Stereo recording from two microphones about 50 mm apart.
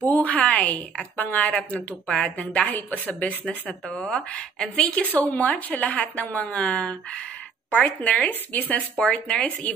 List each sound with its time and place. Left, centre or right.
0.1 s a sound: left
1.1 s a woman's voice: left; by 4.9 s centre
5.1 s a woman's voice: left
9.0 s speech: centre